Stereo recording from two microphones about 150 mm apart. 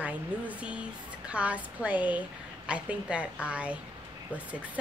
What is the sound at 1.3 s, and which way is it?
A woman's voice, 10° right (ahead or behind).